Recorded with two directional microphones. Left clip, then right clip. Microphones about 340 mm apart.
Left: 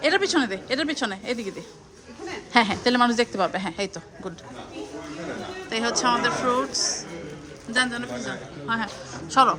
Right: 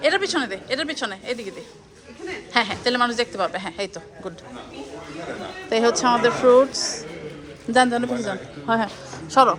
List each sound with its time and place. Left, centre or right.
0.0 s a woman's voice: centre
5.6 s a woman's voice: centre